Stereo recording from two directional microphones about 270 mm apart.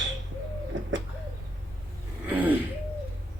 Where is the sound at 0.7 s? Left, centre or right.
Right.